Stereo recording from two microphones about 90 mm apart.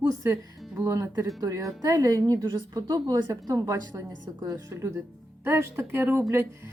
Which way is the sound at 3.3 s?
35° right (ahead or behind).